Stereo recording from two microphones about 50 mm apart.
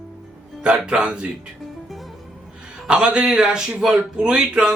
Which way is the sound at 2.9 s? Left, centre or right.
Centre.